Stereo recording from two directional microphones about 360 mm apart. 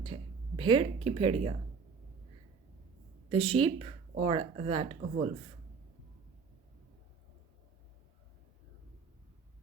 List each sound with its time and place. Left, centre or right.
0.0 s a woman's voice: centre
3.2 s speech: centre